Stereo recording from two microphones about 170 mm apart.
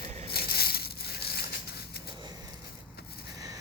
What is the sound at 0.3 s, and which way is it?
Crushing, 65° left (ahead or behind).